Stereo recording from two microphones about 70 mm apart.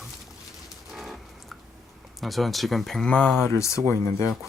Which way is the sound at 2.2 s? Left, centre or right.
Centre.